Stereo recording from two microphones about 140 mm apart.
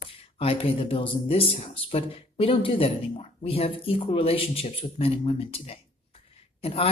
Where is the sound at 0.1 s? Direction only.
45° left (ahead or behind).